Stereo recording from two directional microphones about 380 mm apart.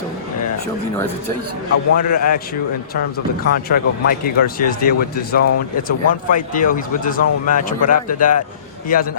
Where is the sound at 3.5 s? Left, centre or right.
Left.